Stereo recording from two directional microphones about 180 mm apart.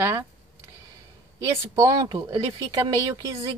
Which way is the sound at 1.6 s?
20° right (ahead or behind).